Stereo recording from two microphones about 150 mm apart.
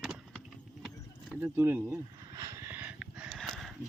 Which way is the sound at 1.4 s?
15° right (ahead or behind).